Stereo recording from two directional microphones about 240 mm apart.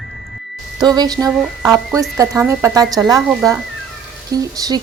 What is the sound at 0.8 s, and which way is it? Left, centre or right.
Speech, centre.